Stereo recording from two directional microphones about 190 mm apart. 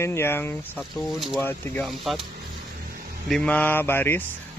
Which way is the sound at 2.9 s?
50° right (ahead or behind).